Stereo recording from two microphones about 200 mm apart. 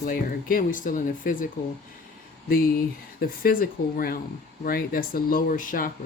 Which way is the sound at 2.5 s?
45° left (ahead or behind).